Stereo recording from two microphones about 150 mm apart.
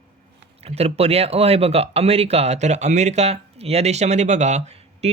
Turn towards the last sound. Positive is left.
turn(degrees=-45)  # may be behind; listen again after turning